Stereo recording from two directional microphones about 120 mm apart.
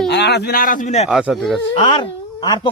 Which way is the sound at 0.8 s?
70° left (ahead or behind).